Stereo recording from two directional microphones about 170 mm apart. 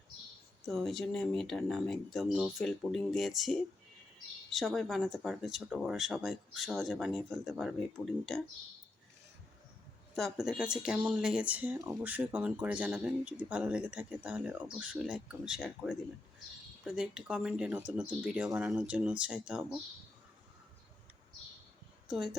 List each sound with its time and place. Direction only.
0.6 s speech: centre (ahead or behind)
10.2 s speech: centre (ahead or behind)
22.0 s speech: 5° right (ahead or behind)